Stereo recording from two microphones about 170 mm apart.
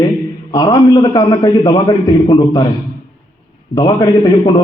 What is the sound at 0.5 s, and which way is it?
A man's voice, 20° left (ahead or behind).